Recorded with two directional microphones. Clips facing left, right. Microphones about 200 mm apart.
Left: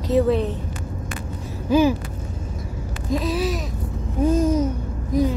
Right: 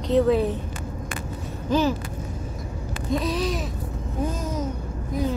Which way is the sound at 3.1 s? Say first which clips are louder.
Left 2 dB; 5° left (ahead or behind).